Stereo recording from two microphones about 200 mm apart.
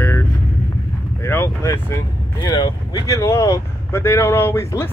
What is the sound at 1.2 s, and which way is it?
Speech, 15° left (ahead or behind).